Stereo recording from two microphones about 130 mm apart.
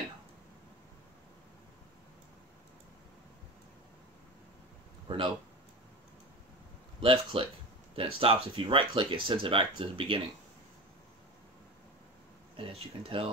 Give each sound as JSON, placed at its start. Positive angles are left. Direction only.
{"t": 5.0, "sound": "a sound", "side_deg": -45}
{"t": 7.0, "sound": "speech", "side_deg": -45}
{"t": 12.5, "sound": "speech", "side_deg": -45}